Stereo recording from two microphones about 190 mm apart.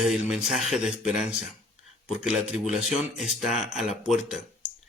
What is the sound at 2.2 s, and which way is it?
Speech, 5° right (ahead or behind).